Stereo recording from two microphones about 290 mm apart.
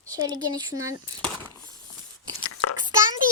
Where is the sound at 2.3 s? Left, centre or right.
Left.